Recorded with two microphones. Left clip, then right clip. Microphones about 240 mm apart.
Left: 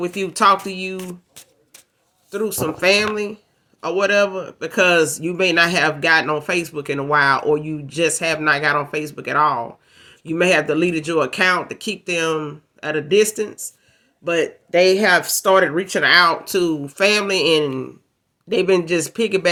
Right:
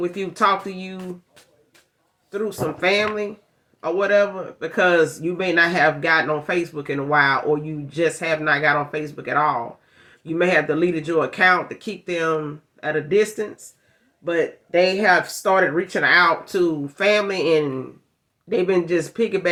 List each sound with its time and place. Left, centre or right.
0.0 s speech: left
2.3 s speech: left